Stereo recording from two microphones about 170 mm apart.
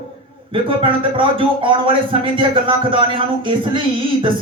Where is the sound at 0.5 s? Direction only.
30° right (ahead or behind).